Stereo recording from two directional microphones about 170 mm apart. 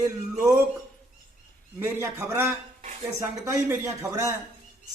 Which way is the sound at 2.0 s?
15° right (ahead or behind).